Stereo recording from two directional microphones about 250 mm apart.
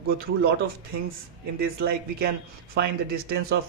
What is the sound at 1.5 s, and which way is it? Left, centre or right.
A man's voice, right.